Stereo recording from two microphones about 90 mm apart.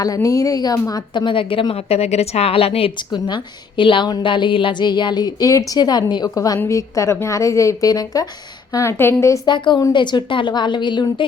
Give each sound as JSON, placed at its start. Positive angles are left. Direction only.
{"t": 0.0, "sound": "a woman's voice", "side_deg": 40}
{"t": 1.1, "sound": "a woman's voice", "side_deg": 65}
{"t": 3.1, "sound": "a woman's voice", "side_deg": 55}
{"t": 8.7, "sound": "a woman's voice", "side_deg": 30}
{"t": 9.5, "sound": "a woman's voice", "side_deg": 60}